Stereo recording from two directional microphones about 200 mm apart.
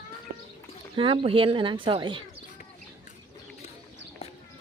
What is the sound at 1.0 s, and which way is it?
Speech, 25° right (ahead or behind).